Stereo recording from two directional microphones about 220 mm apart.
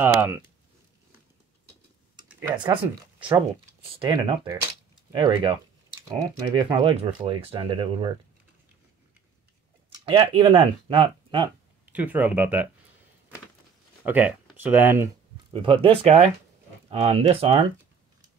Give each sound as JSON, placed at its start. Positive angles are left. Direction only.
{"t": 0.0, "sound": "speech", "side_deg": -10}
{"t": 2.5, "sound": "speech", "side_deg": -20}
{"t": 3.9, "sound": "speech", "side_deg": -20}
{"t": 9.9, "sound": "speech", "side_deg": -20}
{"t": 11.9, "sound": "speech", "side_deg": -5}
{"t": 14.0, "sound": "speech", "side_deg": -5}
{"t": 15.5, "sound": "speech", "side_deg": -25}